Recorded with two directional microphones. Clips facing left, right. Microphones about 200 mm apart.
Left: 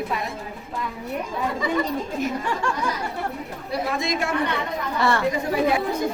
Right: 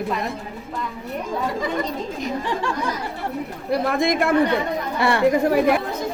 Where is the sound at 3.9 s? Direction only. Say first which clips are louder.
Right 7 dB; 55° right (ahead or behind).